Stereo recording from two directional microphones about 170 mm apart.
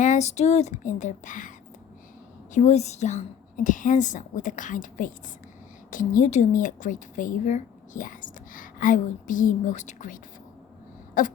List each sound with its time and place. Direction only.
0.0 s a woman's voice: 45° left (ahead or behind)